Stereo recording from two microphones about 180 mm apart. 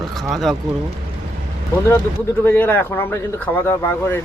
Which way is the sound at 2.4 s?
10° left (ahead or behind).